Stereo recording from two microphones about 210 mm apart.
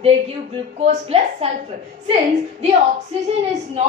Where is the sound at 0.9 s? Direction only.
30° right (ahead or behind).